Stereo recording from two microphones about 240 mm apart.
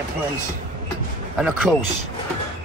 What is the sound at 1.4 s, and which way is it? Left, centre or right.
Speech, centre.